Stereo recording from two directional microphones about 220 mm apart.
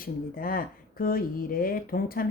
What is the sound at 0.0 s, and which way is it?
Speech, 40° left (ahead or behind).